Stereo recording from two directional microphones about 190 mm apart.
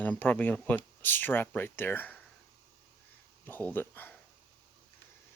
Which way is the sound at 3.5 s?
10° left (ahead or behind).